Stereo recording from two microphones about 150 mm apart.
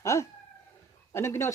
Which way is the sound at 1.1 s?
15° left (ahead or behind).